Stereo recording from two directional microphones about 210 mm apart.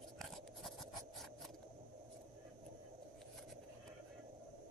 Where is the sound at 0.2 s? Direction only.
Centre (ahead or behind).